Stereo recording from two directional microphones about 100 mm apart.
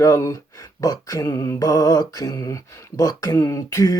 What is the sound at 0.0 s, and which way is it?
Speech, 30° left (ahead or behind).